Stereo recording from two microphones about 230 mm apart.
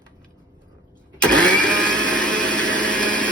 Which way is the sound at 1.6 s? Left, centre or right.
Centre.